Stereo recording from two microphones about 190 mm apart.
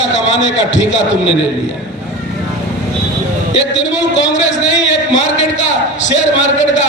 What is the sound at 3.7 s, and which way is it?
A man's voice, 70° left (ahead or behind).